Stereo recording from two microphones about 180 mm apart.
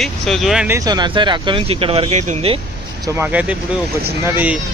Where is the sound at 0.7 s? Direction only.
20° right (ahead or behind).